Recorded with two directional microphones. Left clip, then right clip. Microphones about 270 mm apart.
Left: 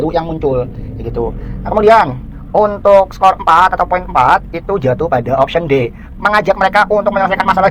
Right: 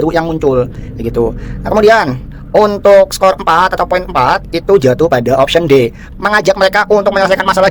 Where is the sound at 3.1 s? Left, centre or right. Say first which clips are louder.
Even; right.